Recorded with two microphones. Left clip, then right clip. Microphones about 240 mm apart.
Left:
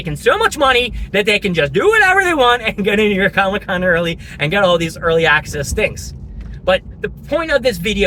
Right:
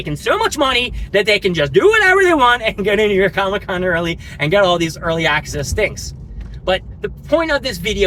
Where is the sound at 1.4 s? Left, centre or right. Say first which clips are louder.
Right 1 dB; centre.